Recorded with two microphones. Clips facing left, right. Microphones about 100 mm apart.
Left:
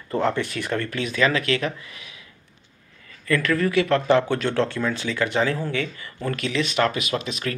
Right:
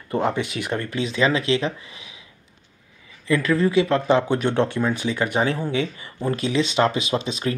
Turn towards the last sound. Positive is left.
turn(degrees=-30)  # may be behind; listen again after turning